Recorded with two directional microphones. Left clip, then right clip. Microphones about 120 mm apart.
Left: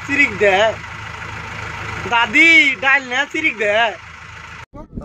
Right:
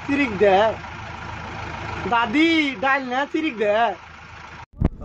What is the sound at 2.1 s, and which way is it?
Speech, 25° right (ahead or behind).